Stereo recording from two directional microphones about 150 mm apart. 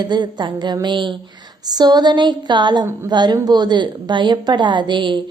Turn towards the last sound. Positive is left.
turn(degrees=-30)  # may be behind; listen again after turning